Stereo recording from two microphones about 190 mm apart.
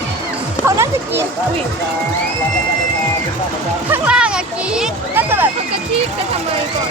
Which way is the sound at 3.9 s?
5° right (ahead or behind).